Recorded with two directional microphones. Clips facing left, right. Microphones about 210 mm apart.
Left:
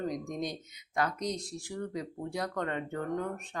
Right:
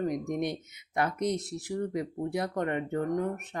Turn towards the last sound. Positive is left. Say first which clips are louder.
# right 4 dB
turn(degrees=-20)  # may be behind; listen again after turning